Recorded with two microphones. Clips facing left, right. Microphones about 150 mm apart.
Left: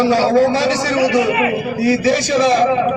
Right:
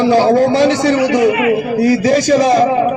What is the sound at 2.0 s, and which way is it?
Speech, 45° right (ahead or behind).